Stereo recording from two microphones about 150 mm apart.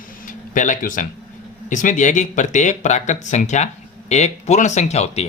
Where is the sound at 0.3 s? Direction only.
60° left (ahead or behind).